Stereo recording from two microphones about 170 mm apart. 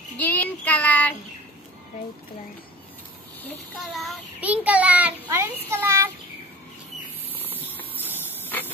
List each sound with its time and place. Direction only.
0.2 s child singing: 10° left (ahead or behind)
3.9 s a child's voice: 5° right (ahead or behind)